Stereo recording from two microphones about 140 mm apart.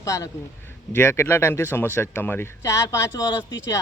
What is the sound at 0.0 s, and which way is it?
A man's voice, 25° left (ahead or behind).